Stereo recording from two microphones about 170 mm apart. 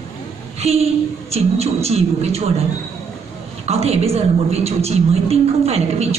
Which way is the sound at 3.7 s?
35° right (ahead or behind).